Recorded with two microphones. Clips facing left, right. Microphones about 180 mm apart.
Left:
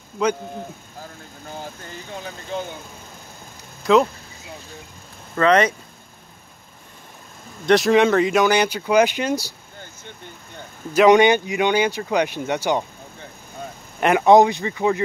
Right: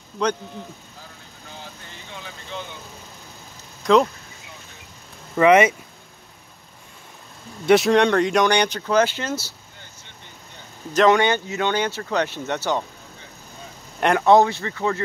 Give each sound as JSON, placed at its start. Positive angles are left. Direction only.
{"t": 0.2, "sound": "speech", "side_deg": 10}
{"t": 1.5, "sound": "speech", "side_deg": 45}
{"t": 3.8, "sound": "speech", "side_deg": 5}
{"t": 5.3, "sound": "speech", "side_deg": -10}
{"t": 7.6, "sound": "speech", "side_deg": 0}
{"t": 9.8, "sound": "vehicle", "side_deg": 50}
{"t": 10.9, "sound": "speech", "side_deg": 15}
{"t": 13.9, "sound": "speech", "side_deg": 5}
{"t": 14.2, "sound": "speech", "side_deg": 15}